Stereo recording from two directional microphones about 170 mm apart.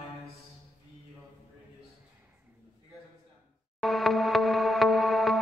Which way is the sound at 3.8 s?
Centre (ahead or behind).